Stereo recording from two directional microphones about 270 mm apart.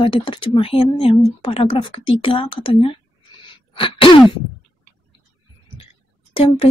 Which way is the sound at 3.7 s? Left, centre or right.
Centre.